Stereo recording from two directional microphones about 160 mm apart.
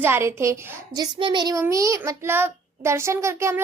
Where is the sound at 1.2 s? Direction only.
30° right (ahead or behind).